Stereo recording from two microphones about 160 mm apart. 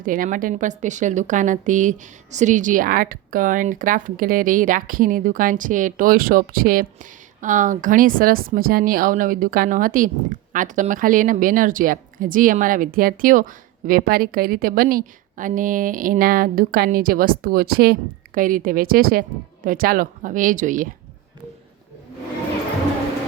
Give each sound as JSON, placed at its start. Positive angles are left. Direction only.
{"t": 0.0, "sound": "a woman's voice", "side_deg": -55}
{"t": 18.3, "sound": "a woman's voice", "side_deg": -60}